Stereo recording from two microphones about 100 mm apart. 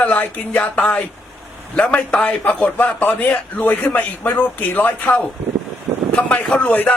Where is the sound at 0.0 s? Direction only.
15° left (ahead or behind).